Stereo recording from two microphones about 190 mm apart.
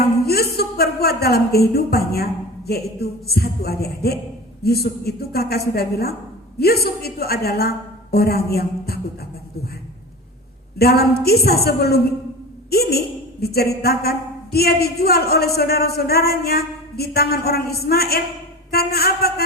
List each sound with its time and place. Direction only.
0.3 s a woman's voice: 55° left (ahead or behind)
10.8 s a woman's voice: 55° left (ahead or behind)